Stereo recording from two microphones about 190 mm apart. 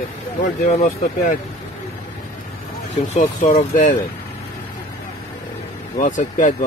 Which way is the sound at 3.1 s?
40° left (ahead or behind).